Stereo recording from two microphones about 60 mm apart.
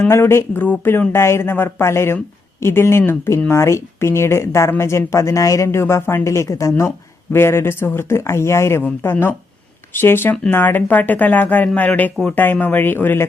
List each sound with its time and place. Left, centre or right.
0.0 s speech: left
0.6 s speech: left
1.1 s speech: left
7.3 s speech: left
9.9 s speech: left